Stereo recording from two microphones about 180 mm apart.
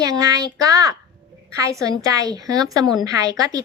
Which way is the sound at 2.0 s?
20° right (ahead or behind).